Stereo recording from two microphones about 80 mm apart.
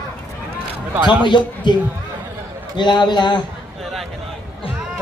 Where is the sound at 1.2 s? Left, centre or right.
Left.